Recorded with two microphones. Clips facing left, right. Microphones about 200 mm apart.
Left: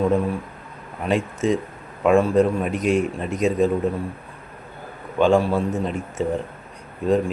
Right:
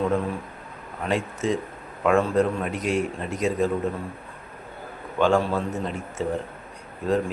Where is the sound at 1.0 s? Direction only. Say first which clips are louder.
Left 4 dB; 15° left (ahead or behind).